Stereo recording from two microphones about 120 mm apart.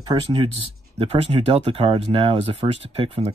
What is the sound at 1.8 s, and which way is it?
Speech, 45° right (ahead or behind).